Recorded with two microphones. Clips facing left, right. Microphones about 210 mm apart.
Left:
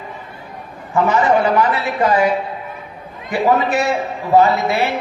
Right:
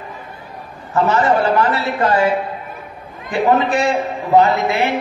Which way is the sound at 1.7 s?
10° left (ahead or behind).